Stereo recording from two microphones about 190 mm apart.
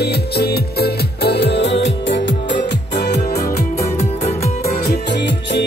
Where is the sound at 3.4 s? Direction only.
40° left (ahead or behind).